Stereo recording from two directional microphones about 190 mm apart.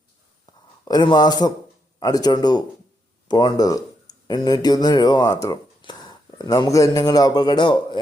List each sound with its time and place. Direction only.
0.9 s a man's voice: 20° left (ahead or behind)